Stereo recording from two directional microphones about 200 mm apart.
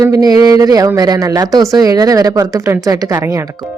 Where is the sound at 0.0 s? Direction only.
15° right (ahead or behind).